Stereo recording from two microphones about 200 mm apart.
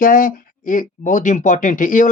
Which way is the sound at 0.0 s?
45° left (ahead or behind).